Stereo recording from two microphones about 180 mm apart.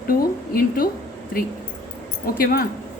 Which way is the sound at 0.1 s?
55° left (ahead or behind).